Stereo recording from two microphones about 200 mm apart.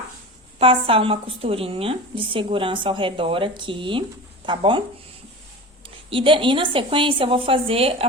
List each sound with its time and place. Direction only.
0.6 s a woman's voice: 25° right (ahead or behind)
5.8 s a woman's voice: 25° right (ahead or behind)